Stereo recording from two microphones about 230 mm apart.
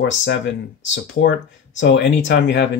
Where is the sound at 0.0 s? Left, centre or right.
Left.